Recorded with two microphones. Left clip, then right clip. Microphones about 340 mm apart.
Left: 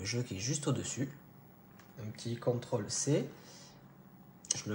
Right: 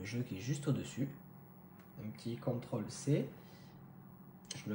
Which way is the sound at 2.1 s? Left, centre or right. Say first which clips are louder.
Left 6 dB; left.